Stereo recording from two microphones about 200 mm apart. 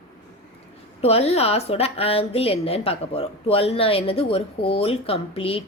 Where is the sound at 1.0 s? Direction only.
30° left (ahead or behind).